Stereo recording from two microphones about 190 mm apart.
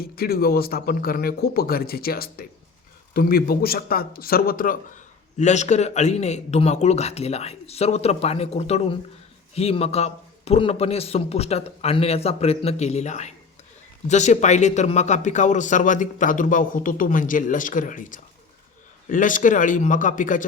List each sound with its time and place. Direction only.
0.0 s a man's voice: 55° left (ahead or behind)
5.4 s a man's voice: 35° left (ahead or behind)